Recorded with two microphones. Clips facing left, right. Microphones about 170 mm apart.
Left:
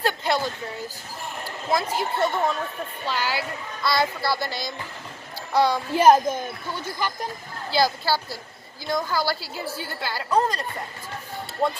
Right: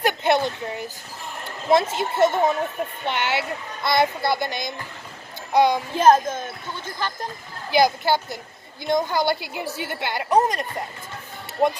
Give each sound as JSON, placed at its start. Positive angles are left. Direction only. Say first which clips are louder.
{"t": 0.0, "sound": "a sound", "louder": "right 4 dB", "side_deg": -20}
{"t": 1.5, "sound": "a woman's voice", "louder": "right 6 dB", "side_deg": -25}
{"t": 5.9, "sound": "speech", "louder": "even", "side_deg": 10}
{"t": 7.7, "sound": "a woman's voice", "louder": "right 4 dB", "side_deg": -20}